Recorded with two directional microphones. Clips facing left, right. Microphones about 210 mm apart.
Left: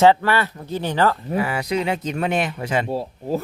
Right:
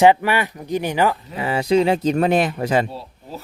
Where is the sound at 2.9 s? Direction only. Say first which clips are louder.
Left 10 dB; 45° left (ahead or behind).